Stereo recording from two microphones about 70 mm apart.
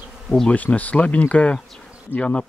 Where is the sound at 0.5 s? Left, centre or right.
Left.